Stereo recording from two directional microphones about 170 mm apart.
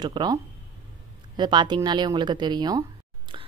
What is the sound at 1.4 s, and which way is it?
Speech, 25° right (ahead or behind).